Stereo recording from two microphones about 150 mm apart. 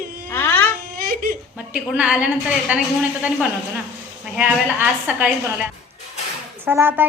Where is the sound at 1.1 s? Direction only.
70° right (ahead or behind).